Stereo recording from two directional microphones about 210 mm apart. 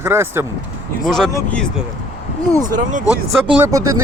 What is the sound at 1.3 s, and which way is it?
Speech, 15° left (ahead or behind).